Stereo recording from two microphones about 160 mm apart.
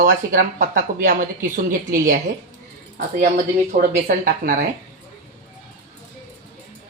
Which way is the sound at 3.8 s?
65° right (ahead or behind).